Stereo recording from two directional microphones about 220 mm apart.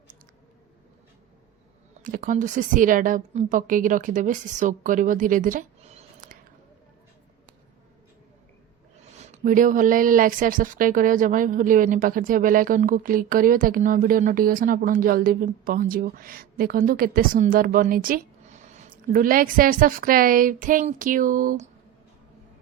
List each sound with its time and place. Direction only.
2.0 s speech: 40° right (ahead or behind)
9.0 s speech: 30° right (ahead or behind)